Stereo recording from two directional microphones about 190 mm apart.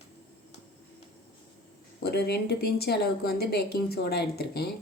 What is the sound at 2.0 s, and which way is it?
Speech, 60° left (ahead or behind).